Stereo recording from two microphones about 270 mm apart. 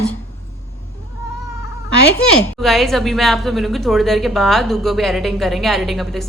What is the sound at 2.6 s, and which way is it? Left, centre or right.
Speech, centre.